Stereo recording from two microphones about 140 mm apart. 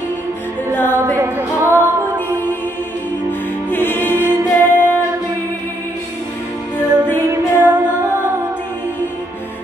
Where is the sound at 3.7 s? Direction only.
15° left (ahead or behind).